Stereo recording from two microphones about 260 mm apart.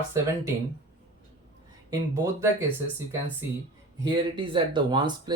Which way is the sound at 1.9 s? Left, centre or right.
Centre.